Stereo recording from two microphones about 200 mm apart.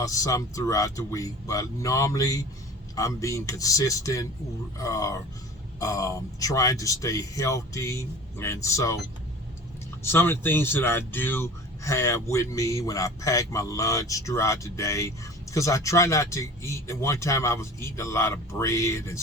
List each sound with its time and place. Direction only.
0.0 s speech: 15° left (ahead or behind)
10.0 s speech: 10° left (ahead or behind)